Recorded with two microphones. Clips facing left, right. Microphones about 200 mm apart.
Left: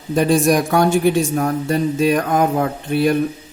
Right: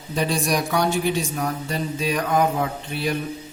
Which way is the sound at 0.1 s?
50° left (ahead or behind).